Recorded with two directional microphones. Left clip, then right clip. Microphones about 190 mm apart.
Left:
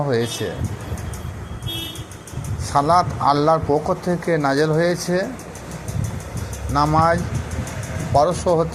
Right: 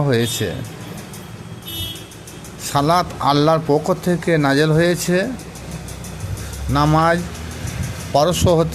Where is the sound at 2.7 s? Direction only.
25° right (ahead or behind).